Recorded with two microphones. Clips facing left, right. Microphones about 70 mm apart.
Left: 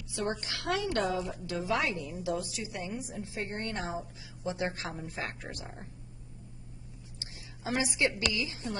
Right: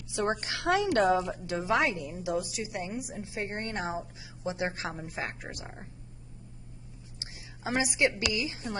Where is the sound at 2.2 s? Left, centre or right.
Centre.